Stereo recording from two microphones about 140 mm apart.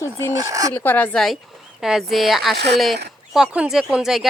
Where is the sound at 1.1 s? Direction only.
Centre (ahead or behind).